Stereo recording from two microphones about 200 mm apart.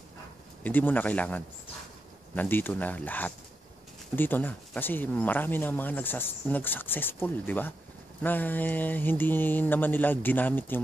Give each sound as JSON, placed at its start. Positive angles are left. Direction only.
{"t": 0.7, "sound": "speech", "side_deg": 10}